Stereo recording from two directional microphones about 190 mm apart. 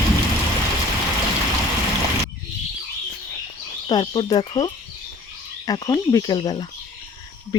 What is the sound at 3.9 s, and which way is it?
Speech, 25° left (ahead or behind).